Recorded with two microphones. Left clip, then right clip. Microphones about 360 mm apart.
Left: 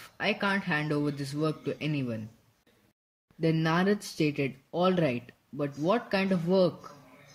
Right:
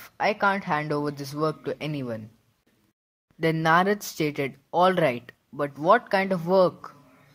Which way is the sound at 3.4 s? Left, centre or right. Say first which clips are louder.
Right 7 dB; centre.